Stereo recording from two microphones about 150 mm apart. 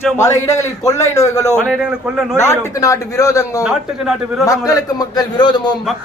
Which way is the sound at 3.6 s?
5° right (ahead or behind).